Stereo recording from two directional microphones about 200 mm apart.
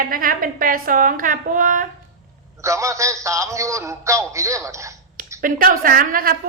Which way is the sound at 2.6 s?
15° right (ahead or behind).